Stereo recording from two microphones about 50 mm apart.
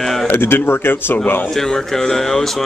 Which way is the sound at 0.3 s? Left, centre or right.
Left.